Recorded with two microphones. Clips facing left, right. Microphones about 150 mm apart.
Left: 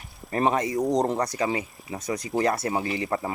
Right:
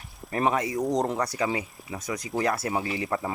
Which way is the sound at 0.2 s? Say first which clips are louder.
Left 2 dB; centre (ahead or behind).